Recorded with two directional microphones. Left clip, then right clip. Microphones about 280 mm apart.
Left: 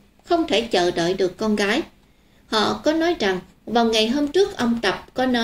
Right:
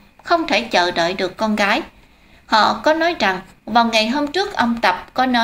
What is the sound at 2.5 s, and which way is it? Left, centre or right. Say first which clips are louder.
A woman's voice: right 6 dB; right.